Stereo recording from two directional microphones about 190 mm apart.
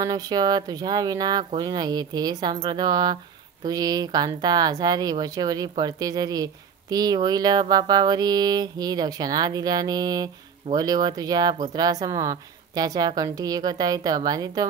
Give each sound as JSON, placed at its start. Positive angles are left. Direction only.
{"t": 0.0, "sound": "speech", "side_deg": -20}